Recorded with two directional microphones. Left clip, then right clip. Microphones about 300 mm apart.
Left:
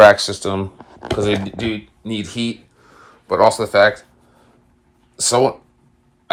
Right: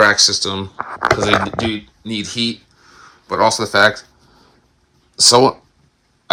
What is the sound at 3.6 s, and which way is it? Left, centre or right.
Speech, centre.